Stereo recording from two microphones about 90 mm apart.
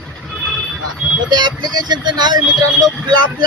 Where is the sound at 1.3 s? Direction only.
55° right (ahead or behind).